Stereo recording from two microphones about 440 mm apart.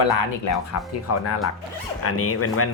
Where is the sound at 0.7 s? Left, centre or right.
Left.